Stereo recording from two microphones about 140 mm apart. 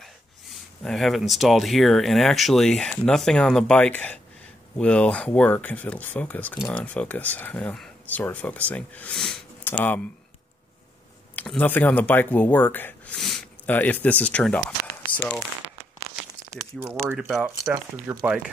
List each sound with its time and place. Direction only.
0.6 s speech: centre (ahead or behind)
11.3 s speech: 10° left (ahead or behind)
16.8 s speech: 15° right (ahead or behind)